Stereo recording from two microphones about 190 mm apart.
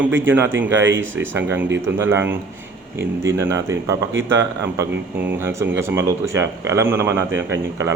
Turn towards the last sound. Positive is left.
turn(degrees=-15)  # may be behind; listen again after turning